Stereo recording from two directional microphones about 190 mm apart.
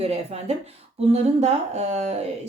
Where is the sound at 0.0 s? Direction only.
35° right (ahead or behind).